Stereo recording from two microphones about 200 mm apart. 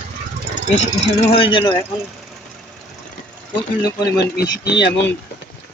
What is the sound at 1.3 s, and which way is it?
Speech, 25° left (ahead or behind).